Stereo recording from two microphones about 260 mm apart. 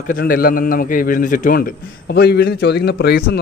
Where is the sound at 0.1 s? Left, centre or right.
Left.